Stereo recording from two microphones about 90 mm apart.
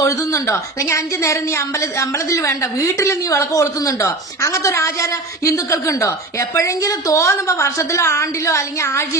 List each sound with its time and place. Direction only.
0.0 s speech: 35° left (ahead or behind)